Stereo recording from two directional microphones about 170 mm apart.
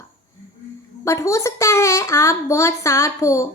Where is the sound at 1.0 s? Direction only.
20° left (ahead or behind).